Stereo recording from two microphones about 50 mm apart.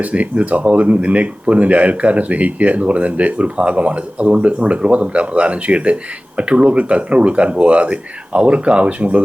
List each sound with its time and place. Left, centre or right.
0.0 s speech: right